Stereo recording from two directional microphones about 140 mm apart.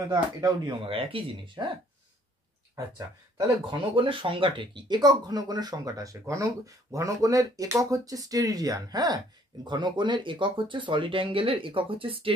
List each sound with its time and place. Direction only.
0.1 s speech: 25° right (ahead or behind)
0.8 s speech: 40° right (ahead or behind)
3.7 s speech: 35° right (ahead or behind)